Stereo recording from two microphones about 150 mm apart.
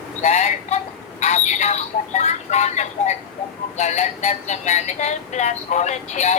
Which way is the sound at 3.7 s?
50° left (ahead or behind).